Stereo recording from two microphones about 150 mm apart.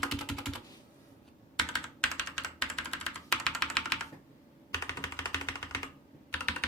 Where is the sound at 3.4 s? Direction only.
5° left (ahead or behind).